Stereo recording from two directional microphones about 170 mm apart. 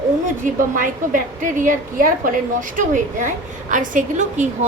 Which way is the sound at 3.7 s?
50° right (ahead or behind).